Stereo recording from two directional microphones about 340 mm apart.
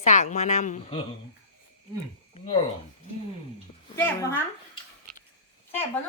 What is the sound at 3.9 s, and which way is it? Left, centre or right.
Speech, centre.